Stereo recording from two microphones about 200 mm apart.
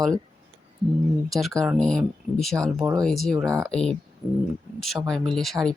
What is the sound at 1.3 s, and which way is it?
Speech, centre (ahead or behind).